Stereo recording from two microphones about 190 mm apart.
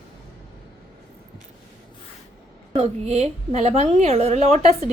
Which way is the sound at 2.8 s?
35° right (ahead or behind).